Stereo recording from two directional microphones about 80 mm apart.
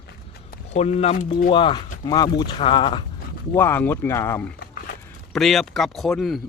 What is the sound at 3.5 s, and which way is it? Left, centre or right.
Speech, left.